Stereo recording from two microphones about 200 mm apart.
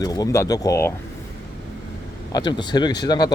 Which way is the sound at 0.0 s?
20° left (ahead or behind).